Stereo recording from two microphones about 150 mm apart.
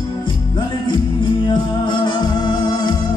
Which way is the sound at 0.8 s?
30° left (ahead or behind).